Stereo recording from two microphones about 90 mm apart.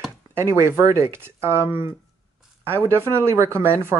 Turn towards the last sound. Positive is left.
turn(degrees=-30)  # may be behind; listen again after turning